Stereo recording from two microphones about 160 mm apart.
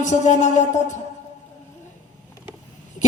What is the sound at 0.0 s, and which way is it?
Speech, 50° left (ahead or behind).